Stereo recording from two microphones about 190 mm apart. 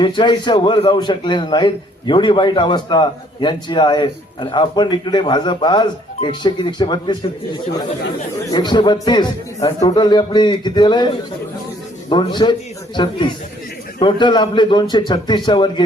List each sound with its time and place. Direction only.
0.0 s a man's voice: 25° left (ahead or behind)